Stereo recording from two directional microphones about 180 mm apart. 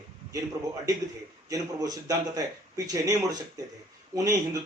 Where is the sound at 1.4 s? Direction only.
20° right (ahead or behind).